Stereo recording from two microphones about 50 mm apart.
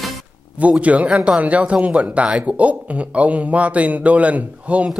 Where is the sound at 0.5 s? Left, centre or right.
Right.